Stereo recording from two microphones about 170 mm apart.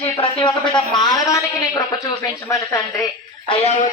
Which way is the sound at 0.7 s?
25° left (ahead or behind).